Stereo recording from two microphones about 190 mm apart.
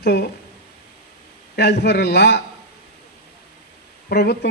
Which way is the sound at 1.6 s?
60° left (ahead or behind).